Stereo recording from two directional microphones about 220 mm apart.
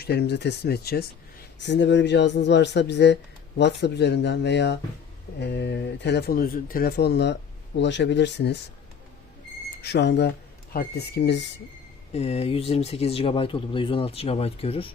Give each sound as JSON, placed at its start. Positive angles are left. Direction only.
{"t": 0.0, "sound": "speech", "side_deg": 50}
{"t": 9.8, "sound": "speech", "side_deg": 50}
{"t": 12.1, "sound": "speech", "side_deg": 30}